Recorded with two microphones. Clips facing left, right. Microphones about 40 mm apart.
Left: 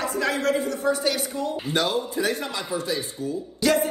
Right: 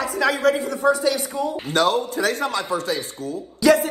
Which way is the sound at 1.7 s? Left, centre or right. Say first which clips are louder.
Right 6 dB; right.